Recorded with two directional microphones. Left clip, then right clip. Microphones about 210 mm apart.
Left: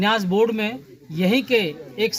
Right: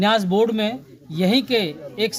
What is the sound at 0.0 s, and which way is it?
A woman's voice, 15° right (ahead or behind).